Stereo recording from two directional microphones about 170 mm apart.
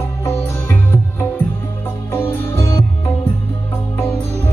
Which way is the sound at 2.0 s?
15° left (ahead or behind).